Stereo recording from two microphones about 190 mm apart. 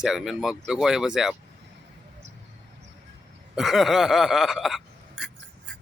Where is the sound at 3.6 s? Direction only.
Centre (ahead or behind).